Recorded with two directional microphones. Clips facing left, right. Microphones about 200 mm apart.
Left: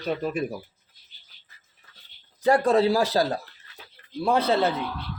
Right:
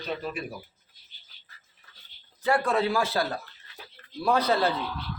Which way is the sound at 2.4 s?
40° left (ahead or behind).